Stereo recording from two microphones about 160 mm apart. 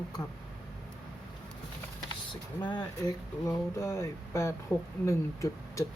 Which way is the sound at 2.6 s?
30° left (ahead or behind).